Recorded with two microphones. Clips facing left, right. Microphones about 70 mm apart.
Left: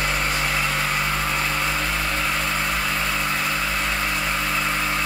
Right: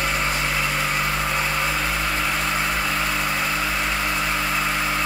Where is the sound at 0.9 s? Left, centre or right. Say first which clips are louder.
Even; centre.